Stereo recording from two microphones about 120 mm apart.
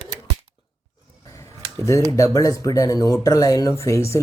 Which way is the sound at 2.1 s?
30° left (ahead or behind).